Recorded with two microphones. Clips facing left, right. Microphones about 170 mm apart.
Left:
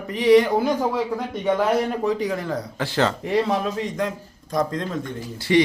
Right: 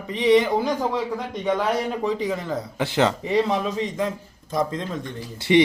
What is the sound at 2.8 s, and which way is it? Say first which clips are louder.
Speech: right 2 dB; 20° right (ahead or behind).